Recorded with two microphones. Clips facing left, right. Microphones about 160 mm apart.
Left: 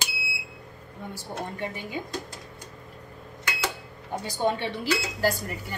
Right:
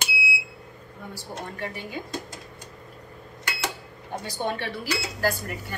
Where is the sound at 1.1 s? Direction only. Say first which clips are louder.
Left 2 dB; 20° left (ahead or behind).